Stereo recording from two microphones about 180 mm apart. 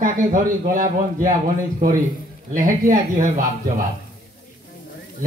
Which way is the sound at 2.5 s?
50° right (ahead or behind).